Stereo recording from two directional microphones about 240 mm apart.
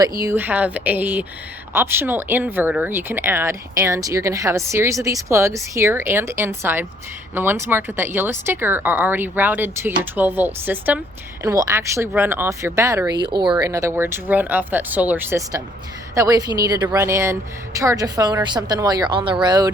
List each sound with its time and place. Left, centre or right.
0.2 s speech: centre